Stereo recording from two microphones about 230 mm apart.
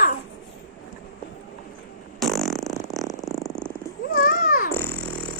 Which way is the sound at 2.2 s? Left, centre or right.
Centre.